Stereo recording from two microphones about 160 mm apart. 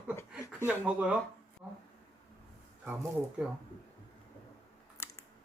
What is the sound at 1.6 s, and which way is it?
Speech, 10° right (ahead or behind).